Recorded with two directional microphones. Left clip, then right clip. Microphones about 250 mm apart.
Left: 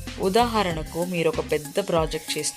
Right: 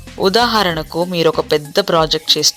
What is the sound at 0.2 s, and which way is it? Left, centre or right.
Speech, centre.